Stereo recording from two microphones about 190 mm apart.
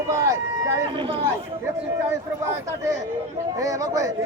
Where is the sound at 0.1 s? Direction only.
15° right (ahead or behind).